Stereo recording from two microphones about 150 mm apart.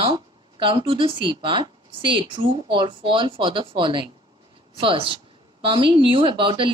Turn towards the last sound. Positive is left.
turn(degrees=-35)  # may be behind; listen again after turning